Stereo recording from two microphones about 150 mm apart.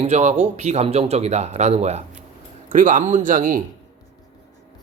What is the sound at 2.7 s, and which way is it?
Speech, 60° right (ahead or behind).